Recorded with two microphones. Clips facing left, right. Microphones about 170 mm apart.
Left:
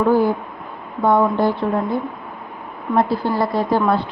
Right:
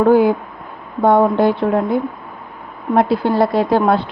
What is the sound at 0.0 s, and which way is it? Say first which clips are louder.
Speech: right 4 dB; 65° right (ahead or behind).